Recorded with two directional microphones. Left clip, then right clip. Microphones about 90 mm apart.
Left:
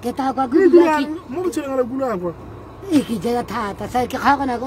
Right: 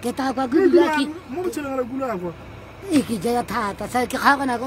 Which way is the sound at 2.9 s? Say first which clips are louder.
Left 2 dB; centre (ahead or behind).